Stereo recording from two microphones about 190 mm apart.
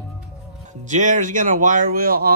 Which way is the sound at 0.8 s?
40° right (ahead or behind).